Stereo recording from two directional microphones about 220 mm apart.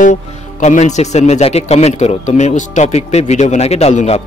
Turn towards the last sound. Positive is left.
turn(degrees=30)  # may be behind; listen again after turning